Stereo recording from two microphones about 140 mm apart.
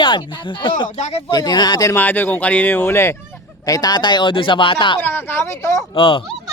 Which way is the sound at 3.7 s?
25° left (ahead or behind).